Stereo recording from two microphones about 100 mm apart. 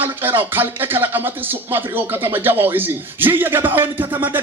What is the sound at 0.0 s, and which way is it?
Speech, 20° right (ahead or behind).